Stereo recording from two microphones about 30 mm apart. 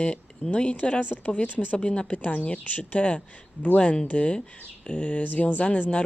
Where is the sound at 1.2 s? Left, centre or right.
Left.